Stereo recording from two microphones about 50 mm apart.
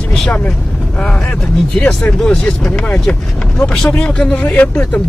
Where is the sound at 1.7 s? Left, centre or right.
Left.